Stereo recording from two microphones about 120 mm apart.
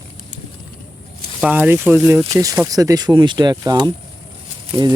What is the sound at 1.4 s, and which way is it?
Speech, 15° right (ahead or behind).